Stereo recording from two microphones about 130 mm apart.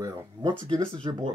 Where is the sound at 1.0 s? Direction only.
35° right (ahead or behind).